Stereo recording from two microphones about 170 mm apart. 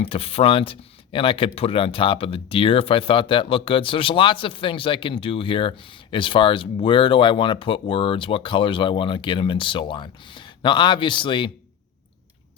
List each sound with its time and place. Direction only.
0.0 s speech: 35° left (ahead or behind)